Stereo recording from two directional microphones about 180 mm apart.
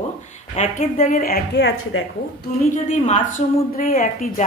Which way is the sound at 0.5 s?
40° left (ahead or behind).